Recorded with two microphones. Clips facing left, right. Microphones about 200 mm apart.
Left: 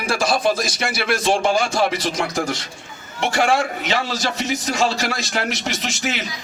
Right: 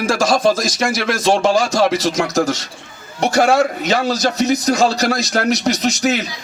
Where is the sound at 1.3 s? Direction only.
40° right (ahead or behind).